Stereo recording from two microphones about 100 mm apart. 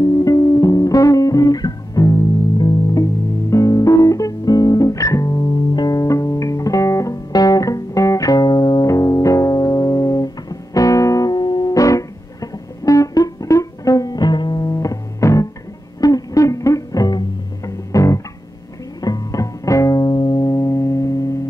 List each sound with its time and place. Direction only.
0.0 s music: 35° left (ahead or behind)
8.8 s music: 35° left (ahead or behind)